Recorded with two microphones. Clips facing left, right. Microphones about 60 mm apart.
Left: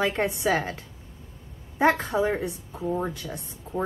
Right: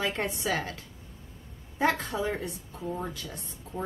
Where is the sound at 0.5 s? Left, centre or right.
Left.